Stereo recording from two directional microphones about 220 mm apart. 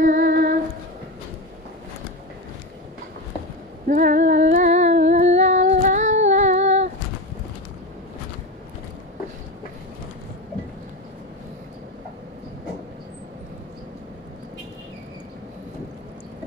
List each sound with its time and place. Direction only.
0.0 s female singing: 35° right (ahead or behind)
3.8 s female singing: 35° right (ahead or behind)
5.1 s humming: 30° right (ahead or behind)